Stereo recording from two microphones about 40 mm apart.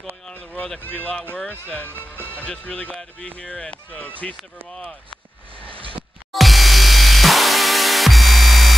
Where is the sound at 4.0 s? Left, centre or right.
Left.